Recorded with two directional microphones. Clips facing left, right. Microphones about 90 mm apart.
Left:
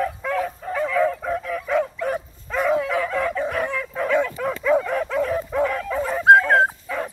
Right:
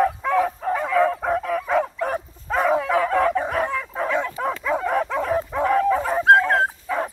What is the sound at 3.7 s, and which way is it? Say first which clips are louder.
Dog: left 2 dB; 20° right (ahead or behind).